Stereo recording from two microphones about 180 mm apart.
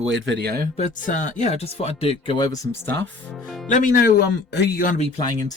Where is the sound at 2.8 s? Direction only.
70° right (ahead or behind).